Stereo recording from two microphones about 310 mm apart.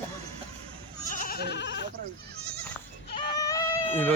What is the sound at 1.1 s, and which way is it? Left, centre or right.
Goat, left.